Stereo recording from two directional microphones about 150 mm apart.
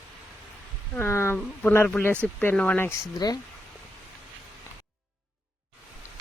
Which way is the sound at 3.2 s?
25° left (ahead or behind).